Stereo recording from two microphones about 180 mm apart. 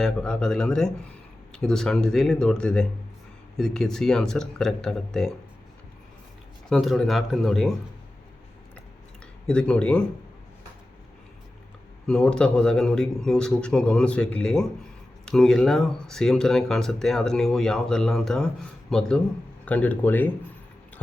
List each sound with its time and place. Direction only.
0.0 s speech: 5° left (ahead or behind)
6.7 s speech: centre (ahead or behind)
9.5 s speech: 5° left (ahead or behind)
12.0 s speech: 5° left (ahead or behind)